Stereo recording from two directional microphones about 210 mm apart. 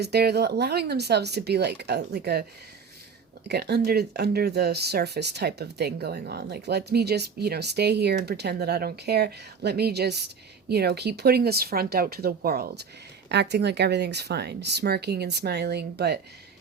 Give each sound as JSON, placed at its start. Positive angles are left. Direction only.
{"t": 0.0, "sound": "speech", "side_deg": -50}
{"t": 3.4, "sound": "speech", "side_deg": -50}